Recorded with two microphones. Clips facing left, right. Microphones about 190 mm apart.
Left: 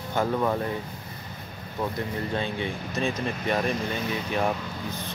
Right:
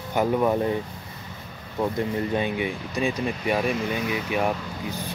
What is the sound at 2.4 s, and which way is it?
Speech, 15° right (ahead or behind).